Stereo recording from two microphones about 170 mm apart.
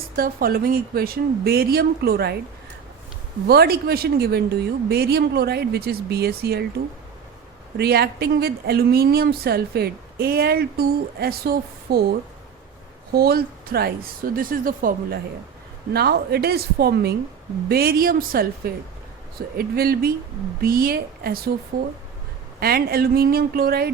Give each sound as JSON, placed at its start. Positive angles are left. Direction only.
{"t": 0.2, "sound": "speech", "side_deg": -60}
{"t": 3.4, "sound": "a woman's voice", "side_deg": -65}
{"t": 7.8, "sound": "speech", "side_deg": -70}
{"t": 13.1, "sound": "speech", "side_deg": -65}
{"t": 15.9, "sound": "a woman's voice", "side_deg": -70}
{"t": 22.6, "sound": "speech", "side_deg": -65}